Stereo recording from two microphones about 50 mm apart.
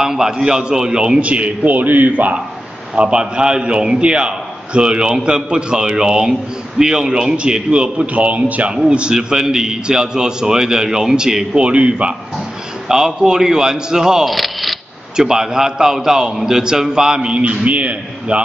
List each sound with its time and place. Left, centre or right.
0.0 s a man's voice: centre; by 2.3 s right
3.0 s a man's voice: centre
8.7 s a man's voice: centre
12.8 s a man's voice: centre
14.3 s a sound: centre
15.1 s a man's voice: centre; by 18.4 s right